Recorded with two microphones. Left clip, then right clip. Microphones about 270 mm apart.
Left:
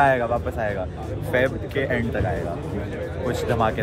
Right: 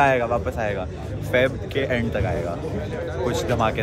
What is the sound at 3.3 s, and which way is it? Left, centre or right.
Speech, centre.